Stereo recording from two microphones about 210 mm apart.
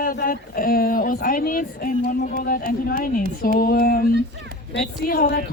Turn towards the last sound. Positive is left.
turn(degrees=45)  # may be behind; listen again after turning